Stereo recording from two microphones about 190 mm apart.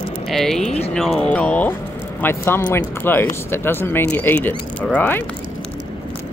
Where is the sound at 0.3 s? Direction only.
Centre (ahead or behind).